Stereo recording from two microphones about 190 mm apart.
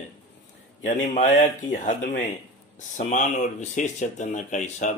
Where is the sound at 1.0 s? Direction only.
40° left (ahead or behind).